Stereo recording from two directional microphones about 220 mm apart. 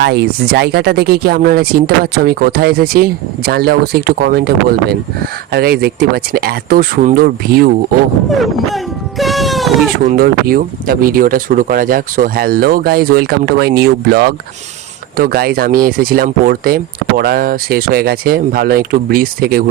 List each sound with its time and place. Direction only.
0.0 s speech: 50° right (ahead or behind)
8.3 s wail: centre (ahead or behind)
10.0 s speech: 40° right (ahead or behind)